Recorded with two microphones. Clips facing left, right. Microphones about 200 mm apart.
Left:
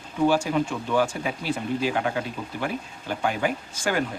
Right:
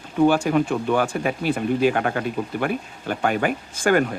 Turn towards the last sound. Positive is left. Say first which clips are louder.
# right 7 dB
turn(degrees=-55)  # may be behind; listen again after turning